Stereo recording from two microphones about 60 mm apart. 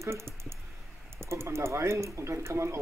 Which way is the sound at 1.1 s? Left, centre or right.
Right.